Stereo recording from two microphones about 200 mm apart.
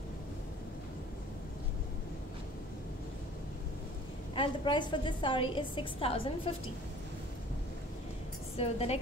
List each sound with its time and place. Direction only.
4.4 s a woman's voice: 25° left (ahead or behind)
8.5 s a woman's voice: 30° left (ahead or behind)